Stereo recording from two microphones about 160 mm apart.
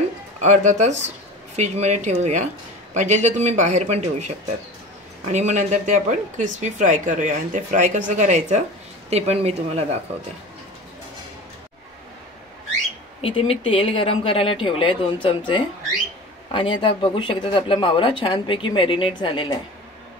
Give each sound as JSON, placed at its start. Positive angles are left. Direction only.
{"t": 0.4, "sound": "a woman's voice", "side_deg": -50}
{"t": 5.3, "sound": "a woman's voice", "side_deg": -45}
{"t": 13.2, "sound": "speech", "side_deg": 35}